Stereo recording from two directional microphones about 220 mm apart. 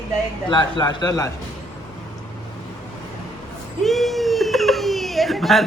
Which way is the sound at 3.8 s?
Centre (ahead or behind).